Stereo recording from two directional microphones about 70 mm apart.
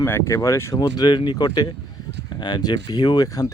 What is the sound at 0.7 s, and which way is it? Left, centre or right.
Speech, left.